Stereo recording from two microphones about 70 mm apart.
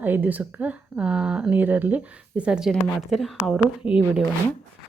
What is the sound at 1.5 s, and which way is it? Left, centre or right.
Speech, right.